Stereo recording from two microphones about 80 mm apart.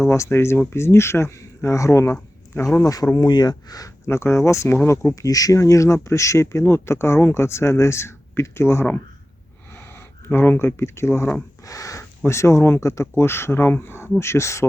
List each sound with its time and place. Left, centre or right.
0.0 s speech: left
3.2 s speech: left
5.1 s speech: left
10.2 s speech: left
11.6 s a sound: left
12.2 s speech: left